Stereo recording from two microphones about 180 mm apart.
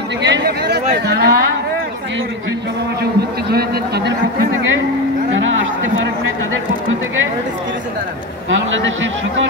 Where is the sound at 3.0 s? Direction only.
60° right (ahead or behind).